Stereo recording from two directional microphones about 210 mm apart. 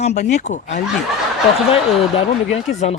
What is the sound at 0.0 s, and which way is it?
Speech, 35° left (ahead or behind).